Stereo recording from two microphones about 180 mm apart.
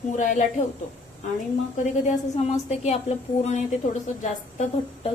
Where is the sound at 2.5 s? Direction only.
35° left (ahead or behind).